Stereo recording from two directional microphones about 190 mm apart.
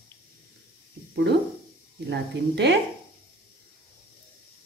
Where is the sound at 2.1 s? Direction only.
60° right (ahead or behind).